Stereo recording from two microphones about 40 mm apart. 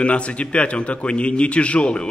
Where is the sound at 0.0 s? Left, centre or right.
Left.